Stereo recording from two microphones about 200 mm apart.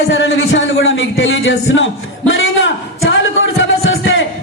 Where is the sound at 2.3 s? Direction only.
75° left (ahead or behind).